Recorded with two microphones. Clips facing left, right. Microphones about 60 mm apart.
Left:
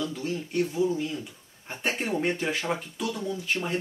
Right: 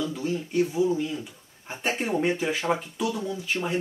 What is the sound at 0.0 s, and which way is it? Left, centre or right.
A man's voice, centre.